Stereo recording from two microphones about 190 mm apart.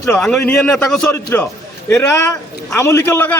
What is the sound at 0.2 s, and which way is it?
A man's voice, 5° left (ahead or behind).